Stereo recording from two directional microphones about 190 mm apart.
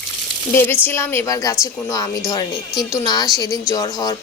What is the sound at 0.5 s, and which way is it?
A woman's voice, 10° left (ahead or behind).